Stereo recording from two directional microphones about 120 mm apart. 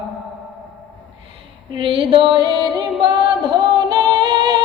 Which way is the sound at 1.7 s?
45° right (ahead or behind).